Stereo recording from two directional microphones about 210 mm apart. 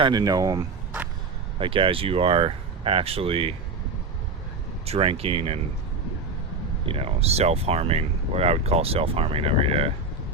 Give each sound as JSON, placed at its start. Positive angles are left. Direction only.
{"t": 0.0, "sound": "speech", "side_deg": -20}
{"t": 4.9, "sound": "speech", "side_deg": -30}
{"t": 6.8, "sound": "speech", "side_deg": -25}